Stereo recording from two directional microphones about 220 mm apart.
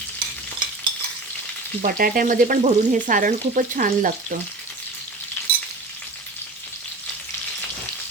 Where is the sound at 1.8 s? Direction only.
40° right (ahead or behind).